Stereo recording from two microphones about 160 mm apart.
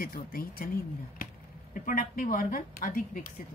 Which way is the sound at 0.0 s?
65° left (ahead or behind).